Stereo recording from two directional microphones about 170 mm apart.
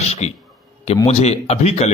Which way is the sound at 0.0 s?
40° left (ahead or behind).